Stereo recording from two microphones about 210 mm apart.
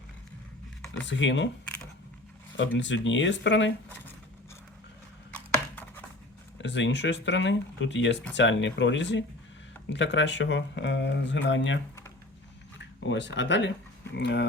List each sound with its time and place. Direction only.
1.0 s speech: 60° left (ahead or behind)
2.7 s speech: 60° left (ahead or behind)
6.6 s speech: 60° left (ahead or behind)
12.8 s speech: 60° left (ahead or behind)